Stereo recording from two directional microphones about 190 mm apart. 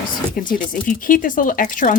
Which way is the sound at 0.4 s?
45° left (ahead or behind).